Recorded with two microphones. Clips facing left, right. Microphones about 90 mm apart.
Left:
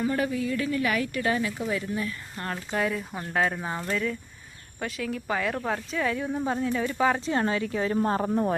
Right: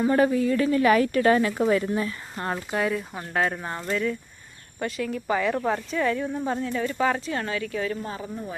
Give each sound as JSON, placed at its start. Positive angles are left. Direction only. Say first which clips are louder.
{"t": 0.1, "sound": "speech", "louder": "right 6 dB", "side_deg": -40}
{"t": 2.0, "sound": "speech", "louder": "right 3 dB", "side_deg": -30}
{"t": 2.6, "sound": "speech", "louder": "even", "side_deg": 0}
{"t": 7.2, "sound": "speech", "louder": "left 3 dB", "side_deg": 25}
{"t": 7.9, "sound": "speech", "louder": "left 9 dB", "side_deg": 50}